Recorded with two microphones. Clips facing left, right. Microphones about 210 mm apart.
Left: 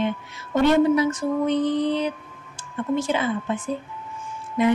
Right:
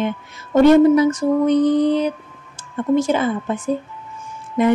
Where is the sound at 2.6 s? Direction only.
45° right (ahead or behind).